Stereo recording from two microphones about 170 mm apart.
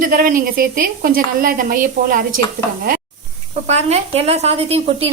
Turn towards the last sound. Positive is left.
turn(degrees=-35)  # may be behind; listen again after turning